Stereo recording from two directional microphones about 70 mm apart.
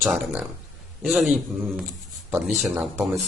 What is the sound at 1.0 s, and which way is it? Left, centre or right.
Speech, centre.